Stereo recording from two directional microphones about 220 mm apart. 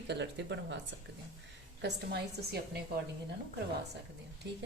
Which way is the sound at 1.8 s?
45° right (ahead or behind).